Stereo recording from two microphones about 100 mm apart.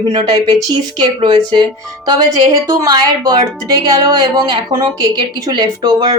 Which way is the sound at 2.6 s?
35° right (ahead or behind).